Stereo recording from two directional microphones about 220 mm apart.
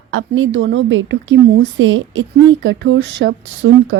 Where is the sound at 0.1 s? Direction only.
65° right (ahead or behind).